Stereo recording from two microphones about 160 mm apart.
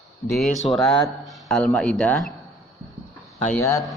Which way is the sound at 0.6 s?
Centre (ahead or behind).